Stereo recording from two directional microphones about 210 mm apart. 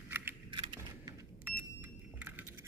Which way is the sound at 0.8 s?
10° right (ahead or behind).